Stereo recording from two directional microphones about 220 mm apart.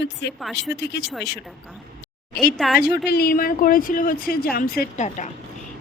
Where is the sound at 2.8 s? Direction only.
45° left (ahead or behind).